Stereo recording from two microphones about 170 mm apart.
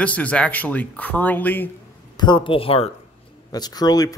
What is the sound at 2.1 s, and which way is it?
Speech, 25° left (ahead or behind).